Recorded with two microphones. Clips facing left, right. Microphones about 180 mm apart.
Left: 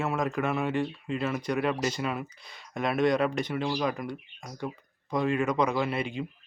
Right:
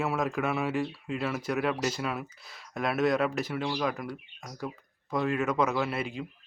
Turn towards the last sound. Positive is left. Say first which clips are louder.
# left 2 dB
turn(degrees=0)  # may be behind; listen again after turning